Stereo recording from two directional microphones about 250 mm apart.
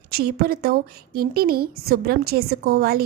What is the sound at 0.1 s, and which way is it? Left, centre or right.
A child's voice, right.